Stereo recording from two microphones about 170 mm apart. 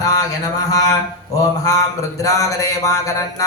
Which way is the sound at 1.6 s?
20° left (ahead or behind).